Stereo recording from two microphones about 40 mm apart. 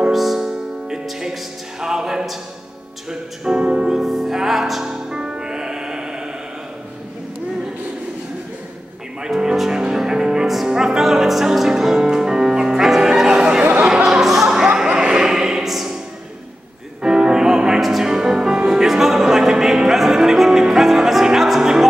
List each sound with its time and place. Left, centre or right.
0.1 s music: centre
3.1 s speech: right
3.9 s music: centre
5.1 s music: centre
9.3 s music: centre
14.2 s music: centre
14.9 s a sound: centre
15.6 s opera: centre
17.0 s music: centre
17.7 s music: centre
18.0 s music: centre